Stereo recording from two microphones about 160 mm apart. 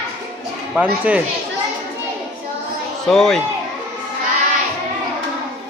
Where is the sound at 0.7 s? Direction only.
10° right (ahead or behind).